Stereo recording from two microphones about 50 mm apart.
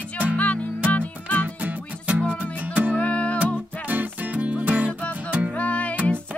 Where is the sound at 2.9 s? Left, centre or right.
Left.